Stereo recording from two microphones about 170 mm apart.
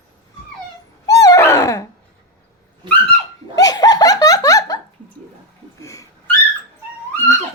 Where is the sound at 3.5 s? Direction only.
20° left (ahead or behind).